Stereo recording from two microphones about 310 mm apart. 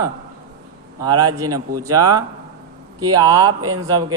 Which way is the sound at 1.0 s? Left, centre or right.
Centre.